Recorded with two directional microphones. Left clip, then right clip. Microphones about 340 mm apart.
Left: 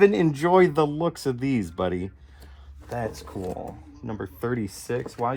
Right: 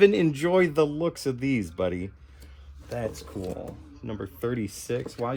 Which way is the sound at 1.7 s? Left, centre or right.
Centre.